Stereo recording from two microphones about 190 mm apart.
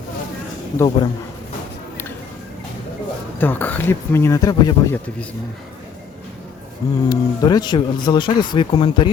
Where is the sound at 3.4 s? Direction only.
10° left (ahead or behind).